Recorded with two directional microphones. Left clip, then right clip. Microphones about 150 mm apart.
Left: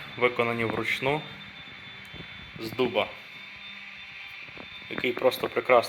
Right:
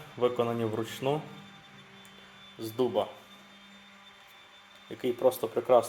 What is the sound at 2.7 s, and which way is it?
Speech, 20° left (ahead or behind).